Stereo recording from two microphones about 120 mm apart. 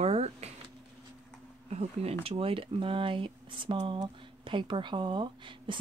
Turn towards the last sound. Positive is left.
turn(degrees=-45)  # may be behind; listen again after turning